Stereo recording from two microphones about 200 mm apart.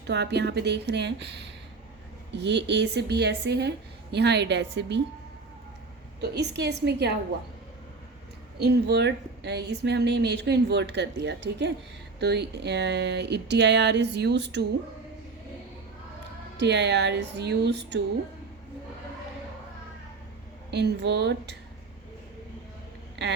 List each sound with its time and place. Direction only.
0.1 s a woman's voice: 60° right (ahead or behind)
6.2 s a woman's voice: 60° right (ahead or behind)
8.5 s a woman's voice: 55° right (ahead or behind)
16.6 s a woman's voice: 60° right (ahead or behind)
20.7 s a woman's voice: 55° right (ahead or behind)